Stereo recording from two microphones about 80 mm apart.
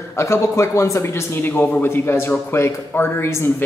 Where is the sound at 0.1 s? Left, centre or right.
Left.